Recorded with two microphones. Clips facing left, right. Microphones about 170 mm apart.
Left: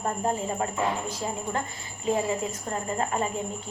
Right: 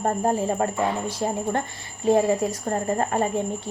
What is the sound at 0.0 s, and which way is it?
A woman's voice, 45° right (ahead or behind).